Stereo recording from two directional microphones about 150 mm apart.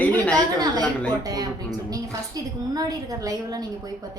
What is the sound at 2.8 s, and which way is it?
Speech, 25° right (ahead or behind).